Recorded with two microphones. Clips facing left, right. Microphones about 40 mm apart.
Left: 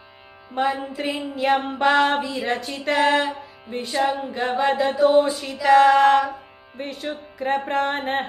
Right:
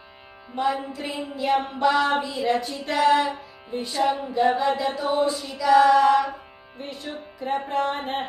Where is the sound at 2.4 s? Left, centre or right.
Left.